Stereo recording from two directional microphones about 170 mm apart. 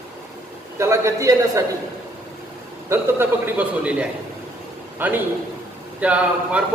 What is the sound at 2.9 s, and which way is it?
A man's voice, 10° right (ahead or behind).